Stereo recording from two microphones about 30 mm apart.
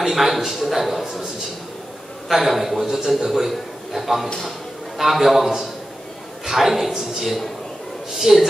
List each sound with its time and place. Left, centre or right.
0.0 s a man's voice: centre
2.2 s a man's voice: centre
2.9 s a man's voice: centre
3.3 s a man's voice: centre